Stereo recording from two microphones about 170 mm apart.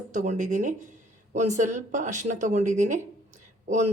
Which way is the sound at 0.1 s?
45° right (ahead or behind).